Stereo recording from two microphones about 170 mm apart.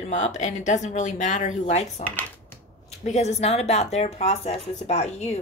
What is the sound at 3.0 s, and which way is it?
Speech, 40° left (ahead or behind).